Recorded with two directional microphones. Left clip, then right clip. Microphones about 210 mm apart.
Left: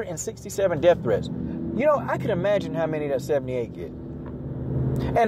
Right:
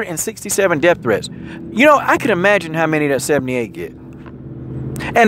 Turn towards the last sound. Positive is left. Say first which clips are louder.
# right 8 dB
turn(degrees=-35)  # may be behind; listen again after turning